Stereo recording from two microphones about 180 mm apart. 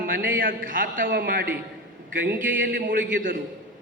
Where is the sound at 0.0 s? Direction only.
55° right (ahead or behind).